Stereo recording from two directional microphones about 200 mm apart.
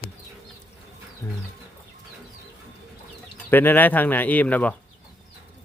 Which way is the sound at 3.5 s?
10° left (ahead or behind).